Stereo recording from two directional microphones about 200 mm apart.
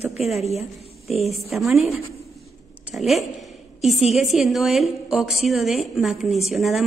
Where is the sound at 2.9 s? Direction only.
Centre (ahead or behind).